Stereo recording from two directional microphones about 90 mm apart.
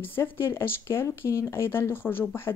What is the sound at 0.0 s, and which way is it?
Speech, 25° left (ahead or behind).